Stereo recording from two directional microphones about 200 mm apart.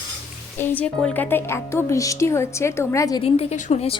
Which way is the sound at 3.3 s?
30° left (ahead or behind).